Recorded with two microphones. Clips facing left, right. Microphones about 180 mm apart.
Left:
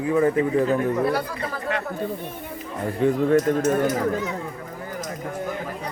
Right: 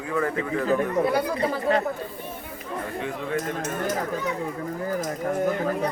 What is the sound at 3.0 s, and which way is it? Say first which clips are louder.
Speech: left 13 dB; 45° left (ahead or behind).